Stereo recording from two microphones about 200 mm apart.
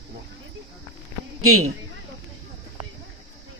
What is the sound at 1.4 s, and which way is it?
Speech, 90° right.